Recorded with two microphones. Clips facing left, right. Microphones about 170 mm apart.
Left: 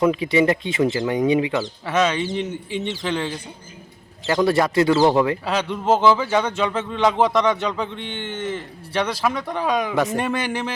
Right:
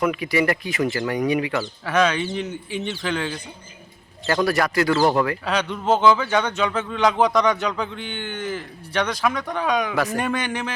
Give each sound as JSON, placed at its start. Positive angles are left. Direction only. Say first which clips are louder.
{"t": 0.0, "sound": "speech", "louder": "left 4 dB", "side_deg": 25}
{"t": 1.8, "sound": "speech", "louder": "right 1 dB", "side_deg": 0}
{"t": 4.3, "sound": "speech", "louder": "left 2 dB", "side_deg": 20}
{"t": 5.5, "sound": "speech", "louder": "left 1 dB", "side_deg": 5}
{"t": 9.9, "sound": "speech", "louder": "left 2 dB", "side_deg": 25}